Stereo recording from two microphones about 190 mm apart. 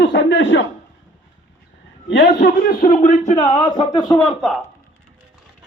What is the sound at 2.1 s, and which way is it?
A man's voice, 55° left (ahead or behind).